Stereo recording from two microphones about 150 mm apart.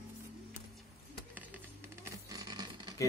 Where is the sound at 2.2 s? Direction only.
25° right (ahead or behind).